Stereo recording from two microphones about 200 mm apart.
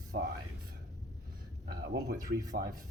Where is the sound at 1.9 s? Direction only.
55° right (ahead or behind).